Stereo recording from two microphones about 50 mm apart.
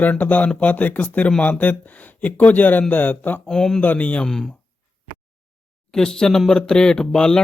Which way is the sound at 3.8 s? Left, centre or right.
Left.